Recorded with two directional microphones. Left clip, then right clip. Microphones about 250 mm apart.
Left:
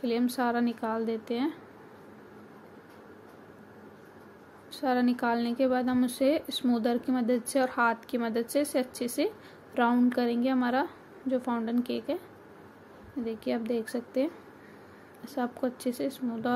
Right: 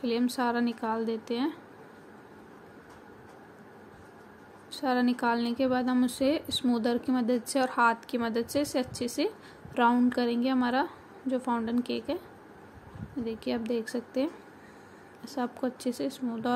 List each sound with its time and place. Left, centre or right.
0.0 s a woman's voice: centre
4.6 s a woman's voice: centre
13.2 s a woman's voice: centre